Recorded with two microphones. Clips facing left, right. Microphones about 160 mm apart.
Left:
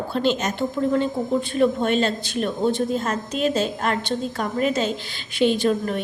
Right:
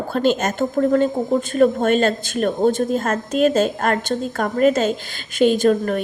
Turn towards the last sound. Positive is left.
turn(degrees=-50)  # may be behind; listen again after turning